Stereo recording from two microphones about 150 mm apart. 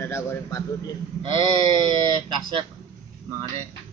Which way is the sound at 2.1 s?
30° right (ahead or behind).